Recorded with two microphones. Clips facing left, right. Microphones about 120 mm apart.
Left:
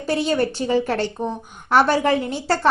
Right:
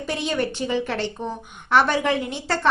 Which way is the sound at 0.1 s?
40° left (ahead or behind).